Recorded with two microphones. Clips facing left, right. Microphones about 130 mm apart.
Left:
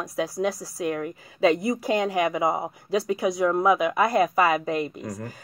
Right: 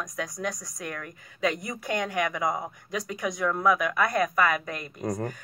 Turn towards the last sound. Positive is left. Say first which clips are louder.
# right 4 dB
turn(degrees=-55)  # may be behind; listen again after turning